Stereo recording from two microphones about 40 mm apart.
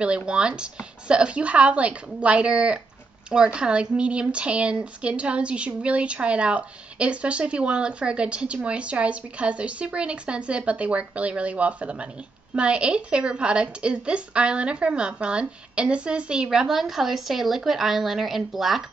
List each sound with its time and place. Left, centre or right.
0.3 s speech: right
16.4 s speech: centre